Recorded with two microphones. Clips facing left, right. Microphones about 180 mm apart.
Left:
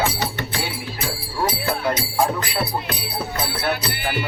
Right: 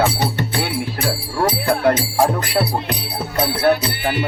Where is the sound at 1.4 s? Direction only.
55° right (ahead or behind).